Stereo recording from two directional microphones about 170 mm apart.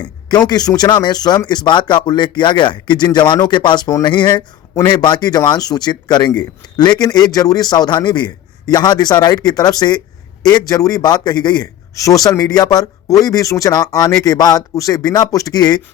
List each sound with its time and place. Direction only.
0.0 s speech: 25° left (ahead or behind)